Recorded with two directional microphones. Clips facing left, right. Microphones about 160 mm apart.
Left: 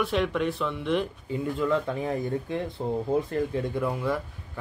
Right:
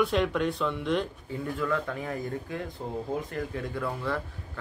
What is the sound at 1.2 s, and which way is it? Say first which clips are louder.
Speech: left 4 dB; 20° left (ahead or behind).